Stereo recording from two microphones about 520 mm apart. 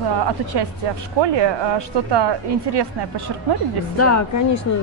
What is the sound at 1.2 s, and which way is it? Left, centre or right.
A woman's voice, right.